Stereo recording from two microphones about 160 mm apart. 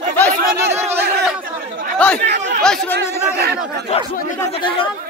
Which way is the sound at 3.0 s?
90° right.